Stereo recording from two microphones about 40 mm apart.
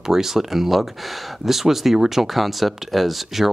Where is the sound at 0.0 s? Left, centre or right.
Centre.